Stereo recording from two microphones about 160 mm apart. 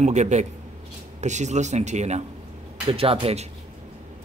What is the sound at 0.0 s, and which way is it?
A man's voice, 45° right (ahead or behind).